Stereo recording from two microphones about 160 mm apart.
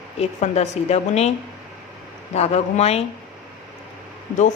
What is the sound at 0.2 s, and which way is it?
Speech, 40° left (ahead or behind).